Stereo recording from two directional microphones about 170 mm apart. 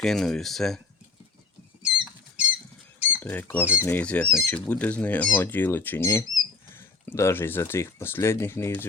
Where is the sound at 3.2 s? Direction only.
10° left (ahead or behind).